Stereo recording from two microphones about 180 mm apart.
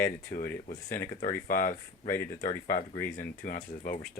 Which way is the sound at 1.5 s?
50° left (ahead or behind).